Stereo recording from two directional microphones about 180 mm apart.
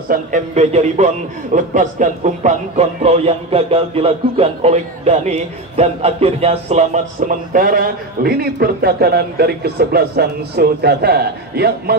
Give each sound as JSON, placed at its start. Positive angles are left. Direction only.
{"t": 0.1, "sound": "a man's voice", "side_deg": -40}